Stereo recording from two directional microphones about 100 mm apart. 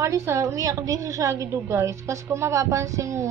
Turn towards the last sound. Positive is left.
turn(degrees=-30)  # may be behind; listen again after turning